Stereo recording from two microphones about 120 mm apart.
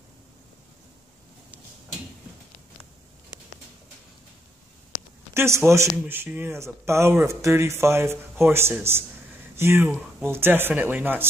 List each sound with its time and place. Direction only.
5.3 s speech: 20° right (ahead or behind)